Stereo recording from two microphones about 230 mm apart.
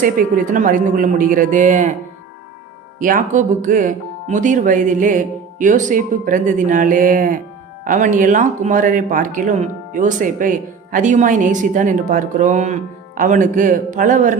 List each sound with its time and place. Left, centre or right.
0.0 s speech: right
3.0 s speech: right